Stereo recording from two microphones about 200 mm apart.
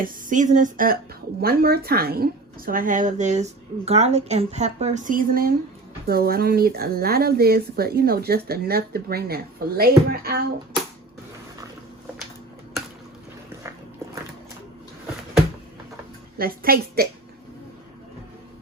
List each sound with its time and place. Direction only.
0.0 s speech: 40° right (ahead or behind)
16.4 s speech: 50° right (ahead or behind)